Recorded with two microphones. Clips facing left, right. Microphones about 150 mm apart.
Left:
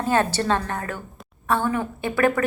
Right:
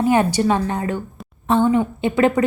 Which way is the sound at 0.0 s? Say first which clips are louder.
Right 5 dB; 15° right (ahead or behind).